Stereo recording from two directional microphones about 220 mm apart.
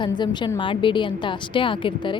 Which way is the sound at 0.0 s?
20° left (ahead or behind).